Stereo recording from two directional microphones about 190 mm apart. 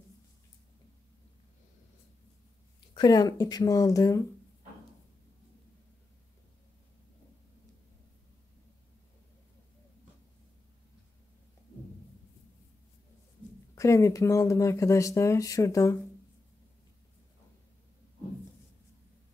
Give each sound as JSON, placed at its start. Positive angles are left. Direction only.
{"t": 2.9, "sound": "speech", "side_deg": 20}
{"t": 13.7, "sound": "speech", "side_deg": 15}